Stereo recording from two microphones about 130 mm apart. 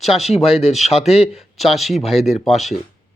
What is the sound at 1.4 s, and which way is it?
Speech, centre (ahead or behind).